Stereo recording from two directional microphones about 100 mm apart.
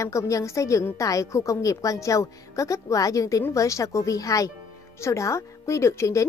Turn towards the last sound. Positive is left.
turn(degrees=30)  # may be behind; listen again after turning